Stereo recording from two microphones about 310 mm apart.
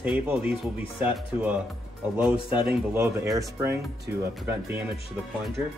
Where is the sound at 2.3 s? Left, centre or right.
Centre.